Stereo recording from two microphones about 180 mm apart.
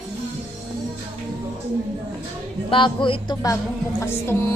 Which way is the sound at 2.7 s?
25° left (ahead or behind).